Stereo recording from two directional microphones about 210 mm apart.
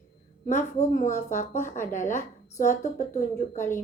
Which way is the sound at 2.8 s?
35° left (ahead or behind).